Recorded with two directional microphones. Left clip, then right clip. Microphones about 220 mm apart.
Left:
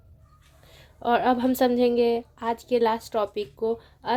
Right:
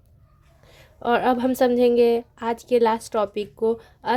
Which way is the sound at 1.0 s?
20° right (ahead or behind).